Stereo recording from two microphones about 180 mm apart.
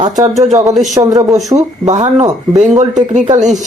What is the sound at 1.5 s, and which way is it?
Speech, 40° right (ahead or behind).